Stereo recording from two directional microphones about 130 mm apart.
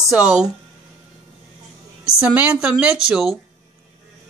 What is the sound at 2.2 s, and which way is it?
Speech, 10° right (ahead or behind).